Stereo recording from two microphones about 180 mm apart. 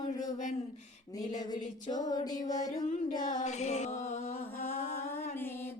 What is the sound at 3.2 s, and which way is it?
Music, 40° left (ahead or behind).